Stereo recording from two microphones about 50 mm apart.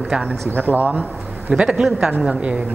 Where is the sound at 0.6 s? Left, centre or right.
Right.